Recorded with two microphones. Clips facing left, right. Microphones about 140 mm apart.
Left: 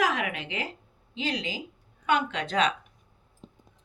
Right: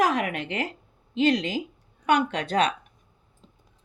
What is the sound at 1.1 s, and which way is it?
Speech, 60° right (ahead or behind).